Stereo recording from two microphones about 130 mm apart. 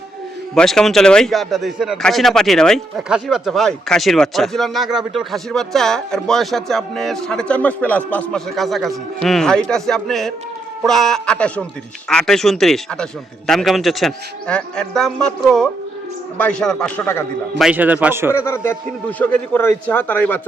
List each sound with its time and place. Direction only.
0.5 s a man's voice: 5° left (ahead or behind)
17.6 s a man's voice: 10° right (ahead or behind)
18.3 s a man's voice: 20° left (ahead or behind)